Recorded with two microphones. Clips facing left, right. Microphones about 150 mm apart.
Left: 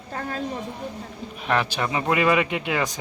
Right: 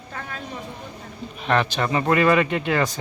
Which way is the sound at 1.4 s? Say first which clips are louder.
Right 2 dB; 5° left (ahead or behind).